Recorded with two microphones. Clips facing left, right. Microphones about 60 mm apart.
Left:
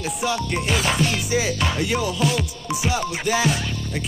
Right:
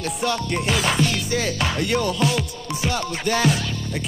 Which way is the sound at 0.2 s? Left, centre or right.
Centre.